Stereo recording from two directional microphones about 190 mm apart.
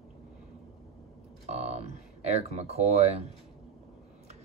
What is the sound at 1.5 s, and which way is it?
Speech, 35° right (ahead or behind).